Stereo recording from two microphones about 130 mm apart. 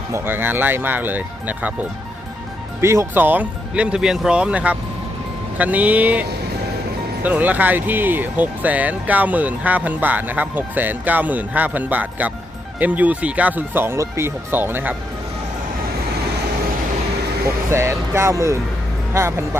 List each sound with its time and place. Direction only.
0.1 s speech: 15° right (ahead or behind)
2.8 s speech: 20° right (ahead or behind)
17.7 s speech: 20° right (ahead or behind)